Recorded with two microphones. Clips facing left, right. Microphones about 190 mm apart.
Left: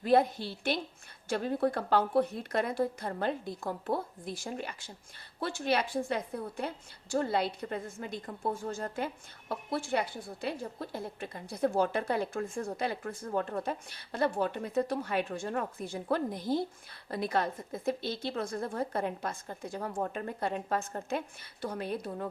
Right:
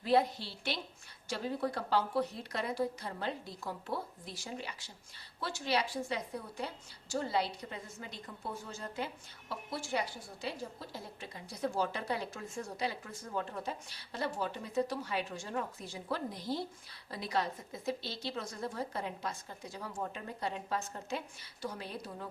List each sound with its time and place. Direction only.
0.0 s a woman's voice: 50° left (ahead or behind)